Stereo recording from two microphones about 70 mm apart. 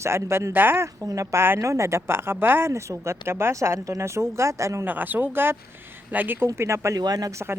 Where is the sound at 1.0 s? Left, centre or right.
Right.